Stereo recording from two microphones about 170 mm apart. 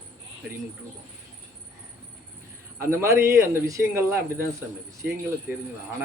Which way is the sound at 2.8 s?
15° right (ahead or behind).